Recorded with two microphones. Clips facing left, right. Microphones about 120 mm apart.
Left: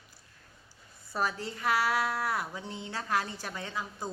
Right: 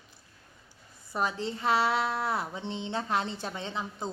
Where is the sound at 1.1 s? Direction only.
20° right (ahead or behind).